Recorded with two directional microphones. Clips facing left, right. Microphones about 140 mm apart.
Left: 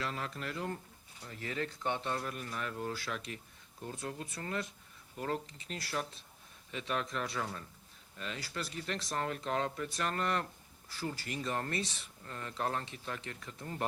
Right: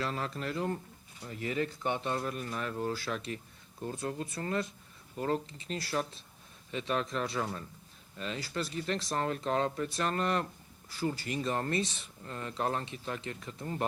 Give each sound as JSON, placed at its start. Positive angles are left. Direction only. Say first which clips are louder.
{"t": 0.0, "sound": "speech", "louder": "right 4 dB", "side_deg": -35}
{"t": 1.4, "sound": "speech", "louder": "right 5 dB", "side_deg": -15}
{"t": 2.1, "sound": "speech", "louder": "right 4 dB", "side_deg": -30}